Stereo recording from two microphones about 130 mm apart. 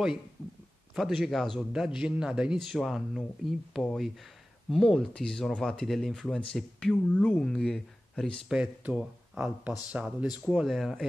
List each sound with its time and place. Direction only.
0.9 s speech: centre (ahead or behind)
8.5 s speech: 10° right (ahead or behind)